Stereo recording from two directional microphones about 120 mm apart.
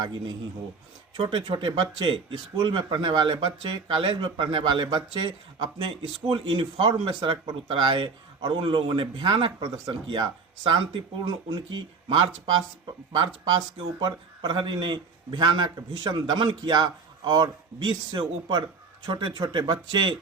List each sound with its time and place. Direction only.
1.1 s speech: 45° right (ahead or behind)